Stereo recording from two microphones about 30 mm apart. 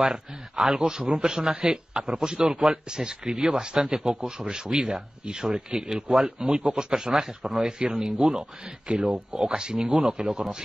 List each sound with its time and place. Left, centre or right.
0.0 s speech: centre